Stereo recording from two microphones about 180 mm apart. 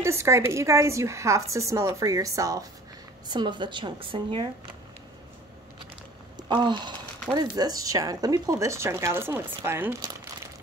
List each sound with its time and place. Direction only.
0.0 s a woman's voice: 15° right (ahead or behind)
6.3 s a sound: 25° right (ahead or behind)
7.3 s a woman's voice: 20° right (ahead or behind)